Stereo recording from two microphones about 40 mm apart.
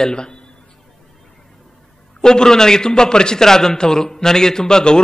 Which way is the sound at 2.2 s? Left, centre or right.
Centre.